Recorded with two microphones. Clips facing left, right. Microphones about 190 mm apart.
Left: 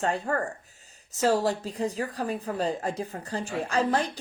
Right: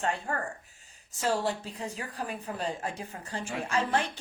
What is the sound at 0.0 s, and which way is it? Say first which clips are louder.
A woman's voice: left 5 dB; 40° left (ahead or behind).